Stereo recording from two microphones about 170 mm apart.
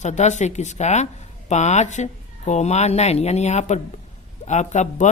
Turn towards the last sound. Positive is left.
turn(degrees=45)  # may be behind; listen again after turning